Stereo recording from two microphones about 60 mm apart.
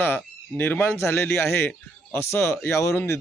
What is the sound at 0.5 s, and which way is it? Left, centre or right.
Speech, left.